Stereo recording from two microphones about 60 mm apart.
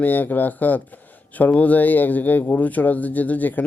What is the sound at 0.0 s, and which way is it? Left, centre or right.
Speech, left.